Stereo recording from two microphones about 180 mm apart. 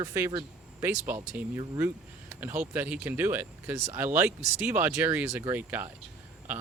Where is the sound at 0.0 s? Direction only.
20° right (ahead or behind).